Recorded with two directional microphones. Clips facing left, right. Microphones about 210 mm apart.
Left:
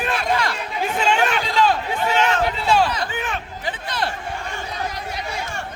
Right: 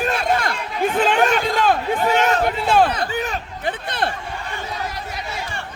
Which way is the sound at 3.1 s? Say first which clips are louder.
Right 3 dB; 40° right (ahead or behind).